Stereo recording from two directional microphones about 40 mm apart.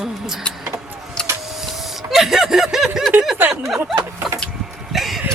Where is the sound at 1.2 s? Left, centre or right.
Left.